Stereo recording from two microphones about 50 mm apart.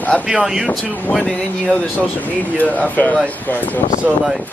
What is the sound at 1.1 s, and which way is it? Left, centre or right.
Speech, left.